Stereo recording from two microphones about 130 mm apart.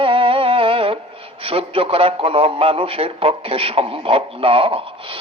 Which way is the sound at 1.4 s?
45° right (ahead or behind).